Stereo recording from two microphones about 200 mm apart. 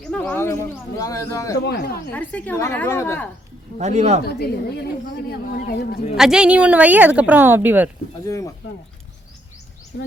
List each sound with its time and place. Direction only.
0.0 s a man's voice: 5° left (ahead or behind)
1.6 s speech: 50° left (ahead or behind)
2.1 s a man's voice: 5° left (ahead or behind)
3.8 s a man's voice: 35° right (ahead or behind)
4.2 s speech: 55° left (ahead or behind)
6.1 s a woman's voice: 5° right (ahead or behind)
8.3 s a man's voice: 15° left (ahead or behind)
9.9 s speech: 60° left (ahead or behind)